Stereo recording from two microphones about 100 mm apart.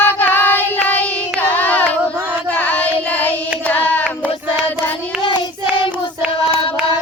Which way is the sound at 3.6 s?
15° left (ahead or behind).